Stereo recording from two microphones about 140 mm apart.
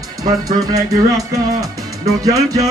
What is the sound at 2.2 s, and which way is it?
Speech, 25° right (ahead or behind).